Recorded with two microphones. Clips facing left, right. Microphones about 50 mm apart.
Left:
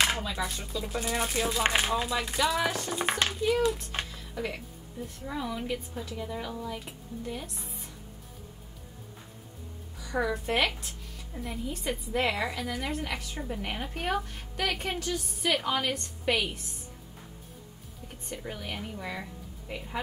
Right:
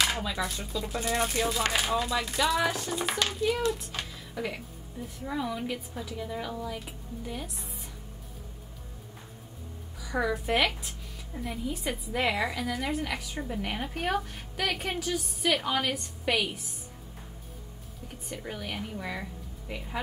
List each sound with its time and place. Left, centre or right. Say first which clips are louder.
0.2 s a woman's voice: right 1 dB; centre
1.6 s speech: left 5 dB; left
2.0 s a woman's voice: right 1 dB; centre
3.1 s speech: left 3 dB; left
4.1 s a sound: even; centre
5.0 s a woman's voice: right 2 dB; centre
9.9 s a woman's voice: even; centre
18.0 s a woman's voice: even; centre